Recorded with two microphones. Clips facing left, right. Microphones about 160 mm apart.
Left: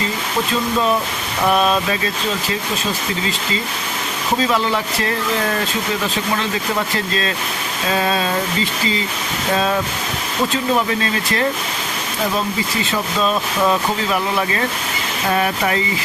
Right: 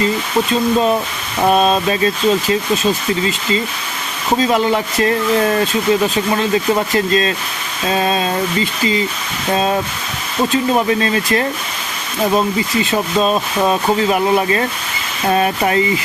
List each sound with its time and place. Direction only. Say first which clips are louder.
1.5 s speech: right 3 dB; 25° right (ahead or behind)
7.9 s speech: right 2 dB; 30° right (ahead or behind)
14.1 s speech: right 5 dB; 25° right (ahead or behind)